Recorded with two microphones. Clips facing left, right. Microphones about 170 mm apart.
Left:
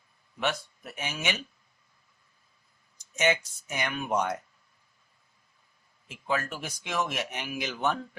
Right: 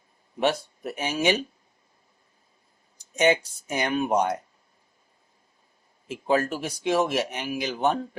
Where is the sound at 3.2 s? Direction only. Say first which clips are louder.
Right 5 dB; 35° right (ahead or behind).